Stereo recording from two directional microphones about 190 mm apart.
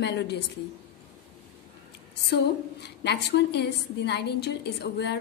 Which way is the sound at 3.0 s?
60° left (ahead or behind).